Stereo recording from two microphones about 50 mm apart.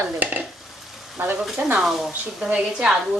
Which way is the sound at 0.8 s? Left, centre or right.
Centre.